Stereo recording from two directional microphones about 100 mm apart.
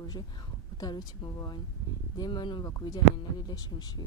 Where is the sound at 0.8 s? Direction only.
40° left (ahead or behind).